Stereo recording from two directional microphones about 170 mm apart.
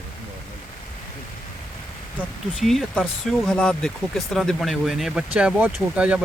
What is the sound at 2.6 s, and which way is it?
Speech, centre (ahead or behind).